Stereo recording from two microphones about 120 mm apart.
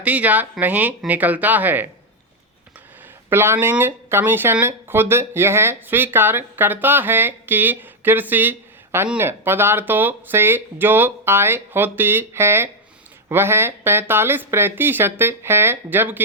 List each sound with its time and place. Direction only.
0.0 s speech: 10° right (ahead or behind)
3.2 s speech: 20° right (ahead or behind)